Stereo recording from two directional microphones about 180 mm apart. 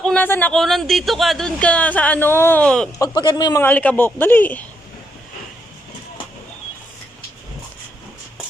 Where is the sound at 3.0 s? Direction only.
20° left (ahead or behind).